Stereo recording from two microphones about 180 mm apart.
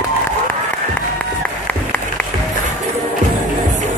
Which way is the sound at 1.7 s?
10° left (ahead or behind).